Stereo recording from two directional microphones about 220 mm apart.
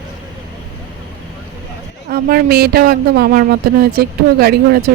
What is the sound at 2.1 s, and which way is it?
Speech, 40° right (ahead or behind).